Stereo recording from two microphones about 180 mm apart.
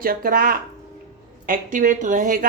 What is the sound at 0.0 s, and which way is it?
Speech, 50° right (ahead or behind).